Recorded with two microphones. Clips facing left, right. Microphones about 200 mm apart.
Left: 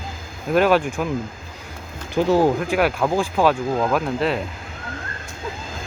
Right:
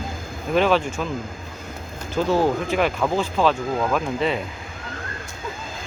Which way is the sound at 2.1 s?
15° left (ahead or behind).